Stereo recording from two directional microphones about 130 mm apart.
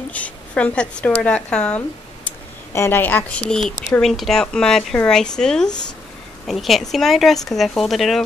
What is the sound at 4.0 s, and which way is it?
Speech, centre (ahead or behind).